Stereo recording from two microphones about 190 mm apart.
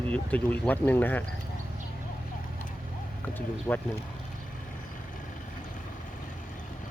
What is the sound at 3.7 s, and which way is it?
Speech, 15° left (ahead or behind).